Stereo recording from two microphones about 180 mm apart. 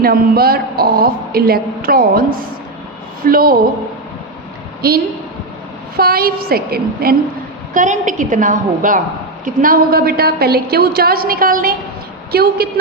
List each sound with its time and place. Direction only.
0.0 s a woman's voice: 55° right (ahead or behind)
6.0 s speech: 55° right (ahead or behind)
7.7 s a woman's voice: 45° right (ahead or behind)